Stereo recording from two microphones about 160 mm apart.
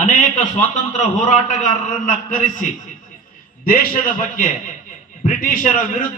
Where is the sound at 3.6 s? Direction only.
65° left (ahead or behind).